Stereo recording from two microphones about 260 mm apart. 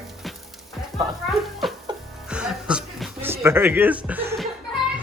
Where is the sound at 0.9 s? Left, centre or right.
Centre.